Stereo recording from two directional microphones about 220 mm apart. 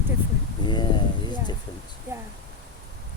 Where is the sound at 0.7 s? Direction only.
20° left (ahead or behind).